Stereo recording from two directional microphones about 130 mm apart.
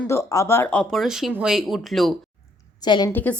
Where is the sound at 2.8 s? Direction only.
35° left (ahead or behind).